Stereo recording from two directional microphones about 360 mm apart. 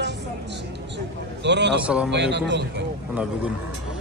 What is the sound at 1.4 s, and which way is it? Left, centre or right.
A man's voice, right.